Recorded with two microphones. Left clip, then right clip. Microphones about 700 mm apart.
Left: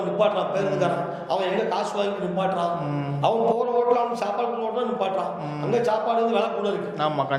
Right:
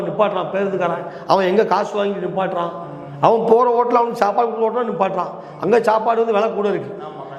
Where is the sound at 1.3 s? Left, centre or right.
Right.